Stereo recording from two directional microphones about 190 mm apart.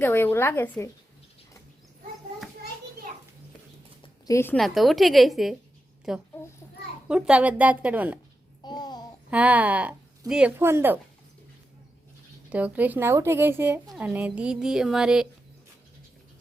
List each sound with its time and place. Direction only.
0.0 s a woman's voice: 10° left (ahead or behind)
4.0 s a sound: 15° left (ahead or behind)
4.5 s a woman's voice: centre (ahead or behind)
8.6 s babbling: 20° left (ahead or behind)
9.3 s a woman's voice: 5° right (ahead or behind)
12.5 s a woman's voice: 5° right (ahead or behind)